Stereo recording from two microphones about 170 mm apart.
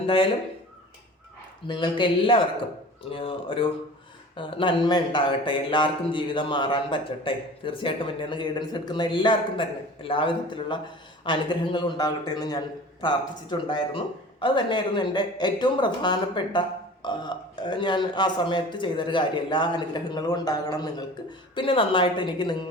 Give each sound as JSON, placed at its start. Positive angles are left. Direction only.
{"t": 0.0, "sound": "speech", "side_deg": 30}
{"t": 1.6, "sound": "a man's voice", "side_deg": 25}